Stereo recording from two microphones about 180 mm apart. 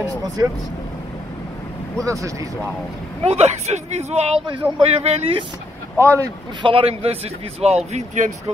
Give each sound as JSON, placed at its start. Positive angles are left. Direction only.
{"t": 2.0, "sound": "speech", "side_deg": -15}
{"t": 3.3, "sound": "speech", "side_deg": -35}
{"t": 4.6, "sound": "speech", "side_deg": -10}
{"t": 5.0, "sound": "speech", "side_deg": -35}
{"t": 5.9, "sound": "speech", "side_deg": -15}
{"t": 6.6, "sound": "speech", "side_deg": -30}